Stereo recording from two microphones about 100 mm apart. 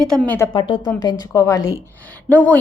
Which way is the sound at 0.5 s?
50° left (ahead or behind).